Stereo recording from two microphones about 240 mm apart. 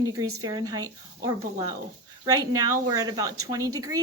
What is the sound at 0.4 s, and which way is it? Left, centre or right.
Speech, centre.